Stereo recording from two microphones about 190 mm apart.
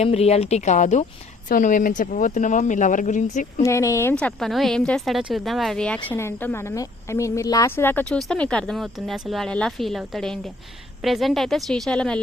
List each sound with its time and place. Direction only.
0.0 s speech: 35° left (ahead or behind)
3.6 s speech: 15° left (ahead or behind)
4.2 s speech: 5° left (ahead or behind)